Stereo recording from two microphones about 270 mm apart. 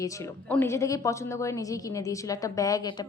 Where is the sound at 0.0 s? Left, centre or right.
Centre.